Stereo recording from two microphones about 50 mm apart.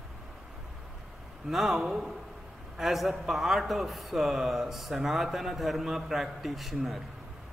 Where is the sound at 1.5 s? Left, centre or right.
Centre.